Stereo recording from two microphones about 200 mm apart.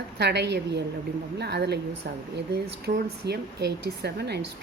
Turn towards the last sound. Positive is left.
turn(degrees=-55)  # may be behind; listen again after turning